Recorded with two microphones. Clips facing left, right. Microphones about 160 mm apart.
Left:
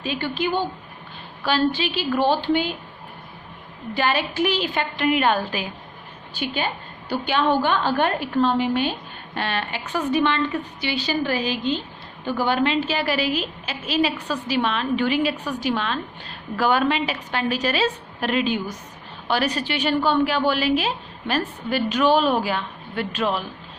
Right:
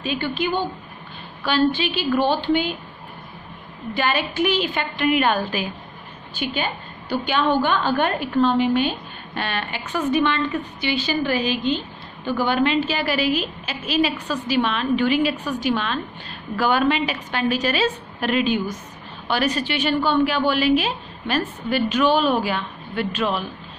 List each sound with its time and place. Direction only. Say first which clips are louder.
0.0 s a woman's voice: right 1 dB; 35° left (ahead or behind)
1.5 s a woman's voice: right 2 dB; 35° left (ahead or behind)
3.9 s a woman's voice: even; 35° left (ahead or behind)
6.3 s a woman's voice: even; 35° left (ahead or behind)